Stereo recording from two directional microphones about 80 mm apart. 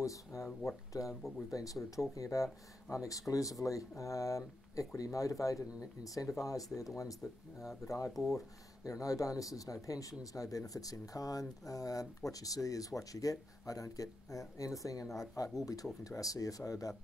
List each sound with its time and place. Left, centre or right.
0.0 s speech: left
8.1 s speech: centre
8.8 s speech: left